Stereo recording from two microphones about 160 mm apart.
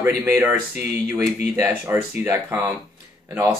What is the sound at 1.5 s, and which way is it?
Speech, 15° right (ahead or behind).